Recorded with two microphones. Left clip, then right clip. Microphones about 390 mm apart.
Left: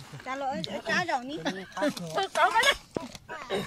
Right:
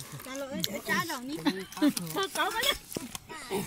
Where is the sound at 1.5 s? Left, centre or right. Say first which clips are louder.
Right 2 dB; centre.